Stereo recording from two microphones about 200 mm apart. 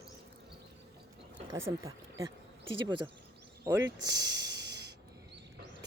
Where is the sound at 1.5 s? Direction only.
15° right (ahead or behind).